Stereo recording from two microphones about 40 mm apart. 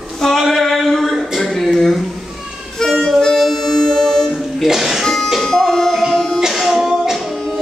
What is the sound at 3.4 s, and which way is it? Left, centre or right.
Music, centre.